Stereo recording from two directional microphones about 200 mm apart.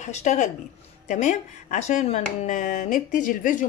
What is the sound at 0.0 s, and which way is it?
Speech, 35° left (ahead or behind).